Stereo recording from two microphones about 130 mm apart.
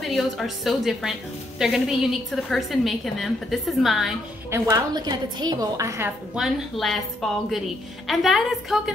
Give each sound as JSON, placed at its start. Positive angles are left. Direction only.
{"t": 0.0, "sound": "a woman's voice", "side_deg": 0}
{"t": 4.5, "sound": "a woman's voice", "side_deg": -30}
{"t": 6.3, "sound": "a woman's voice", "side_deg": 0}